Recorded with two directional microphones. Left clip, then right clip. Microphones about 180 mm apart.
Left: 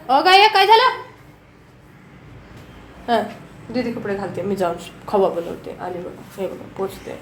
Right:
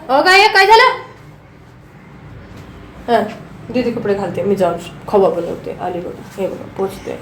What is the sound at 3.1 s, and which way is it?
Speech, 15° left (ahead or behind).